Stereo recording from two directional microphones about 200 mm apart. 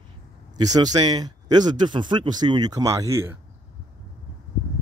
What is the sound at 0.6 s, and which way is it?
Speech, 20° right (ahead or behind).